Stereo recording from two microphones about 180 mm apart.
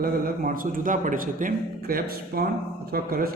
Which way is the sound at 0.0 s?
50° right (ahead or behind).